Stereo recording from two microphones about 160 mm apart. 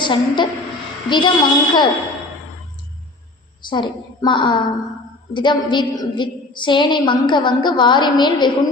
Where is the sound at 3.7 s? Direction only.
30° left (ahead or behind).